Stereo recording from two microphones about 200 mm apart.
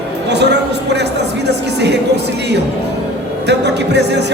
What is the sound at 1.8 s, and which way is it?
Music, 55° right (ahead or behind).